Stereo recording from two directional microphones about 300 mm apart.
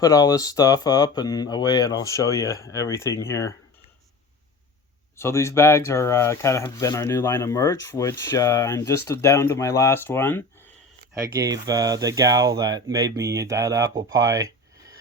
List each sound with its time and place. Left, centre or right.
0.0 s speech: centre
5.1 s speech: centre
11.2 s speech: centre